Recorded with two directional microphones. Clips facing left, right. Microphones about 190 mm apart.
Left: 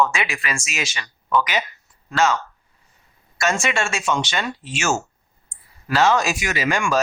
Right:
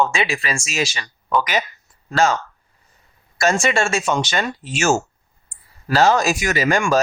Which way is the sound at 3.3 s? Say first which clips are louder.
Right 4 dB; 35° right (ahead or behind).